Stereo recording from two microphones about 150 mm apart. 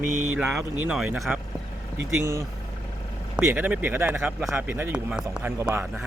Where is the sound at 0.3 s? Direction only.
5° right (ahead or behind).